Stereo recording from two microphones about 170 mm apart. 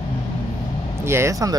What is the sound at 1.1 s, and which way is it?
Speech, 15° right (ahead or behind).